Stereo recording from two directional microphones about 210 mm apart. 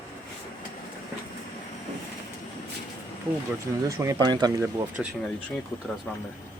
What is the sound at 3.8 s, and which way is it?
Speech, 15° right (ahead or behind).